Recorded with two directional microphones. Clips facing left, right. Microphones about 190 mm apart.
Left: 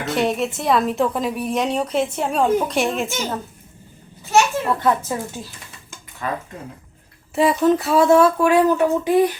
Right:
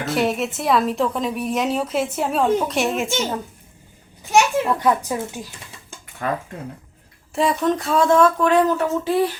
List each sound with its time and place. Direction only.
0.0 s speech: centre (ahead or behind)
4.2 s a child's voice: 15° right (ahead or behind)
7.3 s speech: 5° left (ahead or behind)